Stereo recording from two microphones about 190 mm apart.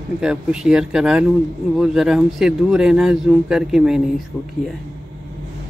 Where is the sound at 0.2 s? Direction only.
5° right (ahead or behind).